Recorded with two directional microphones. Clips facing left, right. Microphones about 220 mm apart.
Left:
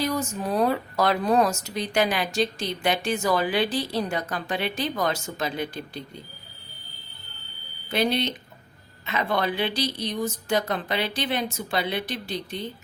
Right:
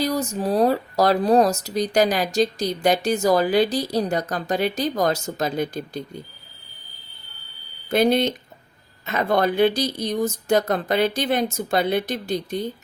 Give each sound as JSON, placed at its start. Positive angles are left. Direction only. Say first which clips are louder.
{"t": 0.0, "sound": "speech", "louder": "right 4 dB", "side_deg": -35}
{"t": 7.9, "sound": "speech", "louder": "right 6 dB", "side_deg": -45}